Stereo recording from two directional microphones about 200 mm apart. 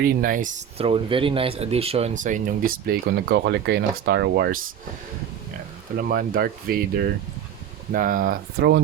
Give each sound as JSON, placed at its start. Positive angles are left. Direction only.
{"t": 0.0, "sound": "speech", "side_deg": -45}
{"t": 6.0, "sound": "speech", "side_deg": -45}